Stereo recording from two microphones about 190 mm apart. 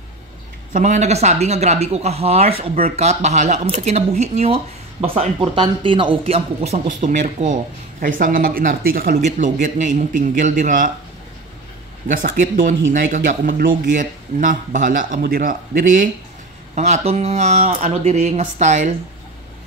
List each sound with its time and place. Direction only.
0.7 s speech: 40° right (ahead or behind)
12.1 s speech: 45° right (ahead or behind)